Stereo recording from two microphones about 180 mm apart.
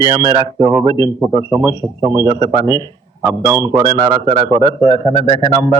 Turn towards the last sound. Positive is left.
turn(degrees=30)  # may be behind; listen again after turning